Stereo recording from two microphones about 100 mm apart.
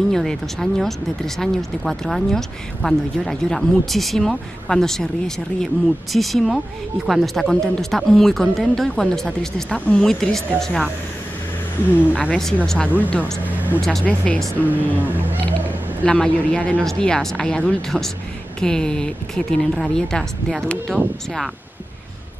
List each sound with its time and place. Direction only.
0.1 s speech: 5° left (ahead or behind)
12.2 s a woman's voice: 5° left (ahead or behind)
13.4 s speech: 15° right (ahead or behind)
13.7 s a woman's voice: 5° left (ahead or behind)
14.7 s speech: 15° right (ahead or behind)
16.0 s a woman's voice: 10° left (ahead or behind)